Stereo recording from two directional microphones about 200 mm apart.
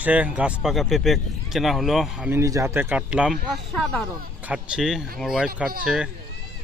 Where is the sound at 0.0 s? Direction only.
5° right (ahead or behind).